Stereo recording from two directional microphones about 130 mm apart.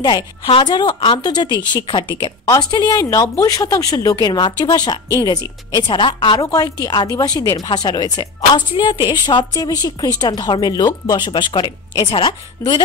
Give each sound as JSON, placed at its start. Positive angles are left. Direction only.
{"t": 0.0, "sound": "speech", "side_deg": 35}